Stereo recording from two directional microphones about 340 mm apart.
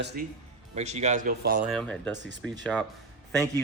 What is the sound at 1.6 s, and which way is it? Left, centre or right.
Speech, centre.